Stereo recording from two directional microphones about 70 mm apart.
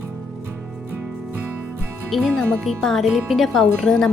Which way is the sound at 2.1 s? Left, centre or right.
Centre.